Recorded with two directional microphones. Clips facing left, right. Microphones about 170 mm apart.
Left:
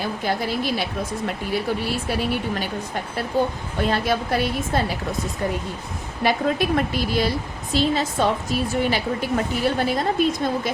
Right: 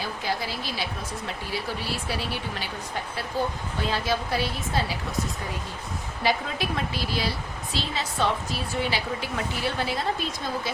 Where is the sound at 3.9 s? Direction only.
55° left (ahead or behind).